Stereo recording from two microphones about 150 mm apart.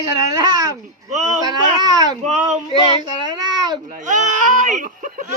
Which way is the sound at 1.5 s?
25° right (ahead or behind).